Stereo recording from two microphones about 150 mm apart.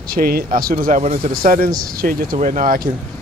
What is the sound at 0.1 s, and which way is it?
Speech, 75° right (ahead or behind).